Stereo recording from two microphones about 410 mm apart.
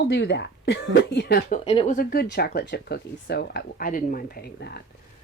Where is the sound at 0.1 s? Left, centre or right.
Left.